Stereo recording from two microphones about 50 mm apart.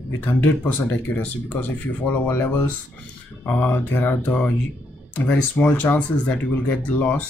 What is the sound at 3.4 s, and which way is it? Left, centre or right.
Speech, left.